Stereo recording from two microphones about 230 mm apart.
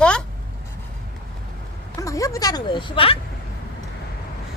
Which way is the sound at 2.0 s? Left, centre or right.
Centre.